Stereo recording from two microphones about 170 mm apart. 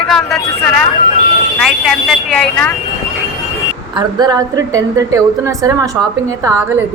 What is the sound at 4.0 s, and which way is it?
A woman's voice, 25° right (ahead or behind).